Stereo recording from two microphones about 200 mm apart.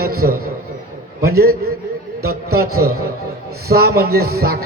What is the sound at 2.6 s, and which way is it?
Speech, 90° right.